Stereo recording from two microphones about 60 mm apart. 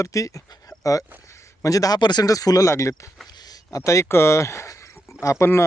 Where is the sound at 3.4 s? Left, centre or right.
Left.